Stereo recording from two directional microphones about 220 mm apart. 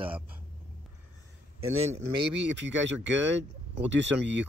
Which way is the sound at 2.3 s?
55° right (ahead or behind).